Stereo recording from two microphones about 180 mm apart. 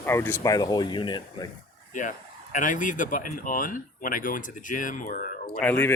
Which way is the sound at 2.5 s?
45° left (ahead or behind).